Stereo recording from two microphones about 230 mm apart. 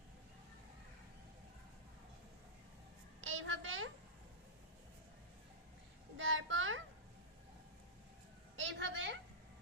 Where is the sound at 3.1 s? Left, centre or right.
Right.